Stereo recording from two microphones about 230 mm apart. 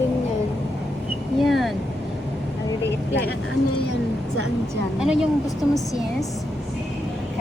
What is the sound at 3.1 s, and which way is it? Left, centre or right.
Speech, left.